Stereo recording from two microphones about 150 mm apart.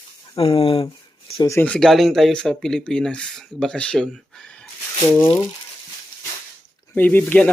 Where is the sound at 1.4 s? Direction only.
20° left (ahead or behind).